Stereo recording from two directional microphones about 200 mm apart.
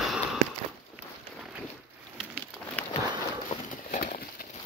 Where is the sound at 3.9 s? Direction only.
40° left (ahead or behind).